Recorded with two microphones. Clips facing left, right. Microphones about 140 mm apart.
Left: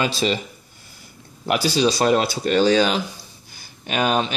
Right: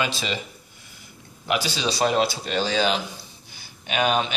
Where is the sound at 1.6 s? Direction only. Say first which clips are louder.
Left 8 dB; 40° left (ahead or behind).